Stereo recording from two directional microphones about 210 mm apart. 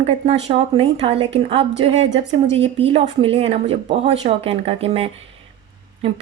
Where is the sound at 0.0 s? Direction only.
30° right (ahead or behind).